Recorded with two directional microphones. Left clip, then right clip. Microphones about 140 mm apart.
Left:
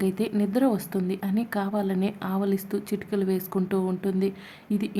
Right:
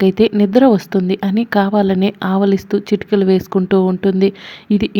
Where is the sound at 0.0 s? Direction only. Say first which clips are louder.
Right 14 dB; 40° right (ahead or behind).